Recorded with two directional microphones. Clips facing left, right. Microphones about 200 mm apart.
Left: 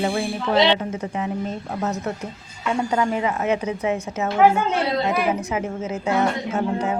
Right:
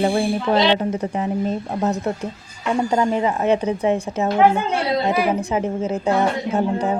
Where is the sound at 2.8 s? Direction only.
30° right (ahead or behind).